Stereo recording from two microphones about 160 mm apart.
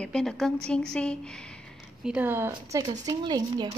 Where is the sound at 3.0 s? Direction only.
25° right (ahead or behind).